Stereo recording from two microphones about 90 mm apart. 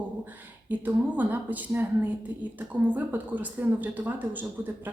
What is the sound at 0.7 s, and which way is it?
A woman's voice, 20° right (ahead or behind).